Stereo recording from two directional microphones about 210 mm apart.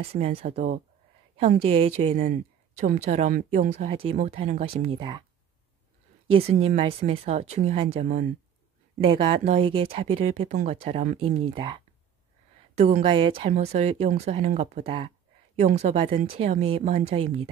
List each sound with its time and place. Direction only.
0.0 s a woman's voice: 30° right (ahead or behind)
6.3 s a woman's voice: 30° right (ahead or behind)